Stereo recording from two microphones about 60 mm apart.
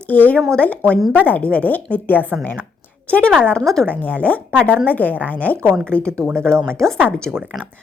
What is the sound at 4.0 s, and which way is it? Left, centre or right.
Speech, left.